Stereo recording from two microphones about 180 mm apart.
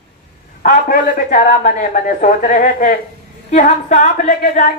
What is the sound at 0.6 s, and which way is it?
A woman's voice, 50° left (ahead or behind).